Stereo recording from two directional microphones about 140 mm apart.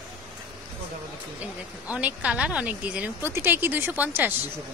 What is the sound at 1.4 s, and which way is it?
Speech, 10° right (ahead or behind).